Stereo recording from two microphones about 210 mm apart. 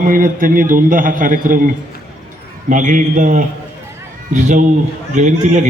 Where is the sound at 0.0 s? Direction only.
40° right (ahead or behind).